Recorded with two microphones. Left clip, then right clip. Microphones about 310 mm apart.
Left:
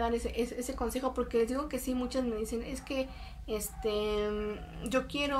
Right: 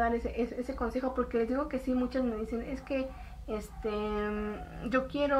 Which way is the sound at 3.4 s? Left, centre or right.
Centre.